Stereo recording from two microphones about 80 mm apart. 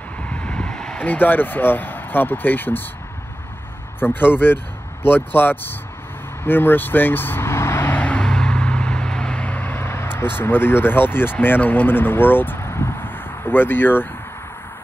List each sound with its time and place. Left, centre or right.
0.2 s vehicle: centre
1.0 s speech: left
4.0 s speech: left
7.9 s vehicle: centre
11.4 s speech: left